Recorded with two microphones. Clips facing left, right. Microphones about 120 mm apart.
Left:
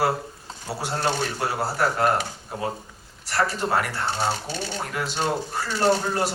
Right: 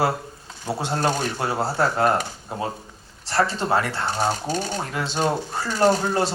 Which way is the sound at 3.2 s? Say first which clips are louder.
Right 2 dB; 25° right (ahead or behind).